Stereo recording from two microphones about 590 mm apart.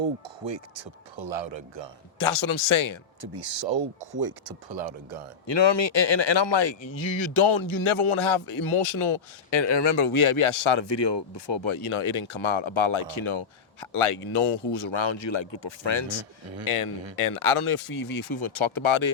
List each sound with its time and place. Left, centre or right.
0.4 s speech: right
2.1 s a man's voice: left
3.2 s speech: right
4.1 s speech: right
5.5 s speech: left
16.6 s speech: left